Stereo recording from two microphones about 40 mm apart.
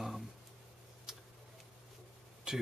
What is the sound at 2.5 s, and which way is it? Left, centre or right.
Speech, centre.